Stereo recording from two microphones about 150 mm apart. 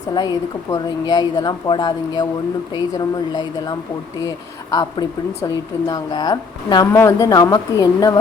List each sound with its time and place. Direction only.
0.1 s speech: 25° left (ahead or behind)